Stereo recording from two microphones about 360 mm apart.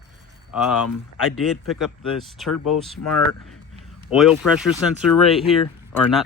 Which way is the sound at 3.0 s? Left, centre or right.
Left.